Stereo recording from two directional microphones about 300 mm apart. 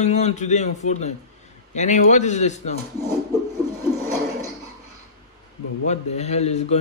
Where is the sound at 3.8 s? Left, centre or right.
Centre.